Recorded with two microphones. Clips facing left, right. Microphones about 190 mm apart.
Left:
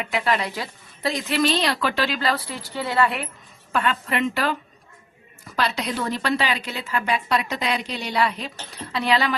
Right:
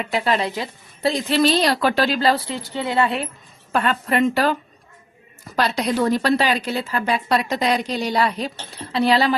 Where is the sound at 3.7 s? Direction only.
40° right (ahead or behind).